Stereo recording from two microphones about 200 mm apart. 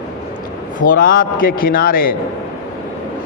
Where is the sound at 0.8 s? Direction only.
45° left (ahead or behind).